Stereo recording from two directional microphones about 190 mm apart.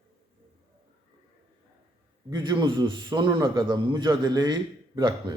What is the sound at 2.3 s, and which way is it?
A man's voice, 25° right (ahead or behind).